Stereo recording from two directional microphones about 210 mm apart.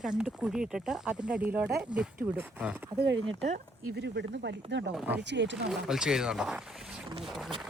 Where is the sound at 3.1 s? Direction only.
60° right (ahead or behind).